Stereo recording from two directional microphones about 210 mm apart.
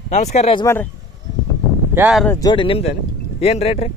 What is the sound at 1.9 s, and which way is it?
Speech, 5° right (ahead or behind).